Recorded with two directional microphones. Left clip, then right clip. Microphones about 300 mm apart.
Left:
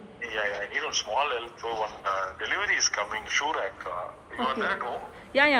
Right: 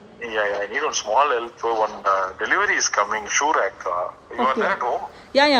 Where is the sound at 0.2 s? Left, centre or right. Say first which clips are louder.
Right 7 dB; right.